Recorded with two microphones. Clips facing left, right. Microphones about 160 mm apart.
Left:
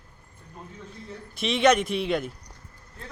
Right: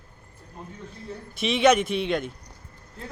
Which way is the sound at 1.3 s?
Centre (ahead or behind).